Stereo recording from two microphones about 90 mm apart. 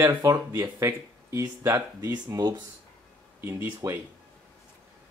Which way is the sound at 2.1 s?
45° right (ahead or behind).